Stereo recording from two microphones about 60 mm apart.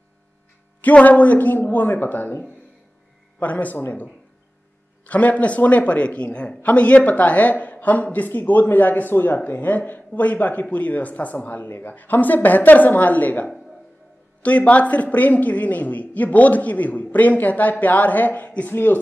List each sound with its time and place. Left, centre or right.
0.7 s a woman's voice: left
5.0 s a woman's voice: left